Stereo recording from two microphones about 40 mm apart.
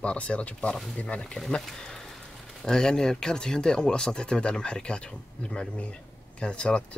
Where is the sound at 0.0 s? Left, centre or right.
Left.